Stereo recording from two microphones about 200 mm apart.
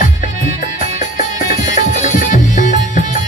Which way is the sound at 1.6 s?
40° left (ahead or behind).